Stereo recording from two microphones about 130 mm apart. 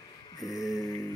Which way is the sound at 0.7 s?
25° left (ahead or behind).